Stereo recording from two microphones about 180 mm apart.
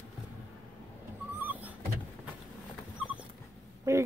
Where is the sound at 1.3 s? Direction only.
10° right (ahead or behind).